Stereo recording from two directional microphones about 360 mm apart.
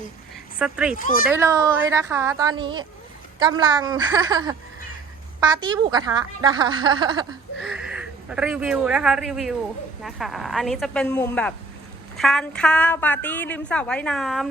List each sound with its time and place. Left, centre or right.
0.6 s a woman's voice: centre
0.9 s speech: left
1.3 s a woman's voice: centre
7.6 s a woman's voice: centre